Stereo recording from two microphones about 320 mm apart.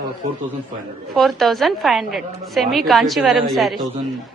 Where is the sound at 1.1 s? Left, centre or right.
Centre.